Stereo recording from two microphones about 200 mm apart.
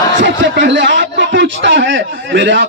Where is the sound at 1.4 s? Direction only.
65° right (ahead or behind).